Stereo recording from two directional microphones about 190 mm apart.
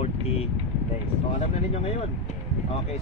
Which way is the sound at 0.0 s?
35° left (ahead or behind).